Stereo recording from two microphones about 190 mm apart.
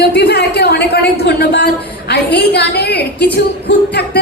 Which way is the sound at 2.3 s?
60° left (ahead or behind).